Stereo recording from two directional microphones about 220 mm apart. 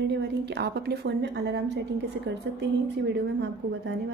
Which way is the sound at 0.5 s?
50° right (ahead or behind).